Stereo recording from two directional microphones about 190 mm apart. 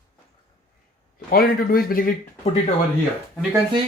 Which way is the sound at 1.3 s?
50° left (ahead or behind).